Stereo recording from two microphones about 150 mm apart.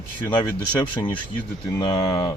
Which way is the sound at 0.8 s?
30° left (ahead or behind).